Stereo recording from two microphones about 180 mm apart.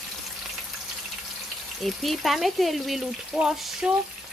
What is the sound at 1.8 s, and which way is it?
Frying, centre (ahead or behind).